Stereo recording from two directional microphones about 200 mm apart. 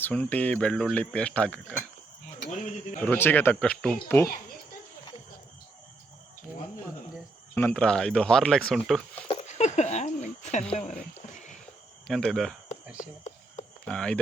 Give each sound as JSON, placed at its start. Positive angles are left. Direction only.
{"t": 0.0, "sound": "speech", "side_deg": 10}
{"t": 3.0, "sound": "speech", "side_deg": 10}
{"t": 7.5, "sound": "speech", "side_deg": 5}
{"t": 9.2, "sound": "a sound", "side_deg": 35}
{"t": 12.0, "sound": "speech", "side_deg": 0}
{"t": 13.8, "sound": "speech", "side_deg": 5}